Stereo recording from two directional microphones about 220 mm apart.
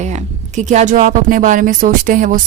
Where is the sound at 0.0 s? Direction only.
30° right (ahead or behind).